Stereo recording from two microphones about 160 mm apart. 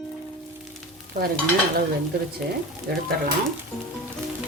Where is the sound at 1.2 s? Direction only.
45° right (ahead or behind).